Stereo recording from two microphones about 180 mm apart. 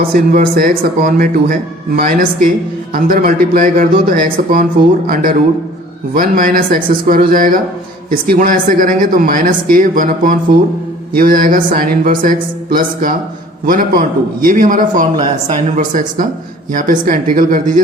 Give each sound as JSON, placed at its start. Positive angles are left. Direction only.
{"t": 0.1, "sound": "speech", "side_deg": -50}